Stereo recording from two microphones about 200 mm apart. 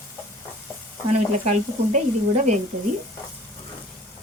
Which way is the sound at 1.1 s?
35° right (ahead or behind).